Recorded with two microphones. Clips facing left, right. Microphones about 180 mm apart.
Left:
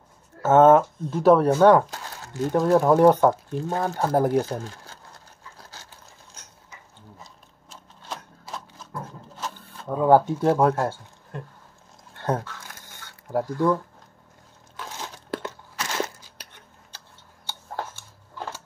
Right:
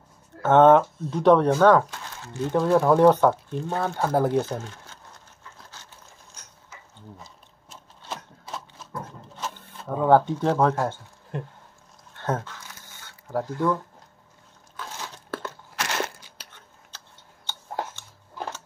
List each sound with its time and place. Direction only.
0.4 s speech: 5° left (ahead or behind)
1.9 s crumpling: 40° left (ahead or behind)
2.6 s speech: 5° left (ahead or behind)
4.5 s speech: 35° left (ahead or behind)
7.7 s a sound: centre (ahead or behind)
9.3 s speech: centre (ahead or behind)
12.2 s speech: 10° left (ahead or behind)
15.7 s crunch: 70° right (ahead or behind)
16.3 s a sound: 15° left (ahead or behind)